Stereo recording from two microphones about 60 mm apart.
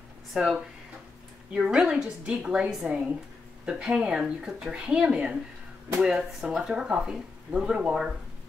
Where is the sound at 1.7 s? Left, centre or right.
Centre.